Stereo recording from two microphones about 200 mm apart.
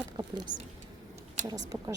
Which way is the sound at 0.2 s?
20° right (ahead or behind).